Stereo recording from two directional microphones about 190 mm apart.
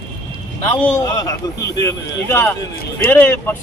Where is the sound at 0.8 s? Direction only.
15° left (ahead or behind).